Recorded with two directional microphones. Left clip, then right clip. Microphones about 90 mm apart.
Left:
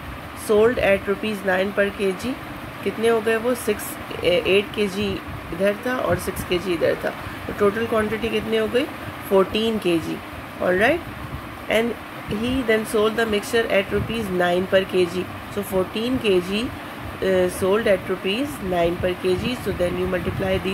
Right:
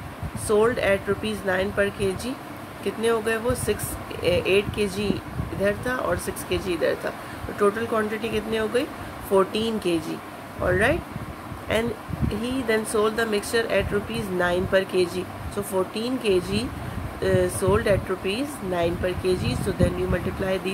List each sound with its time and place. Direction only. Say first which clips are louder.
0.5 s speech: left 3 dB; 35° left (ahead or behind)
12.4 s speech: left 4 dB; 30° left (ahead or behind)